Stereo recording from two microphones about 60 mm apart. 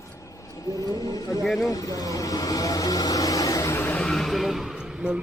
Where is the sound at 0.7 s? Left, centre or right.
Left.